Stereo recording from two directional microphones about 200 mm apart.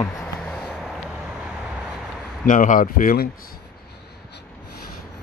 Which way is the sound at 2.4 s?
40° left (ahead or behind).